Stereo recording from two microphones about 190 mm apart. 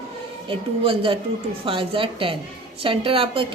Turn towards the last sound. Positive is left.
turn(degrees=-30)  # may be behind; listen again after turning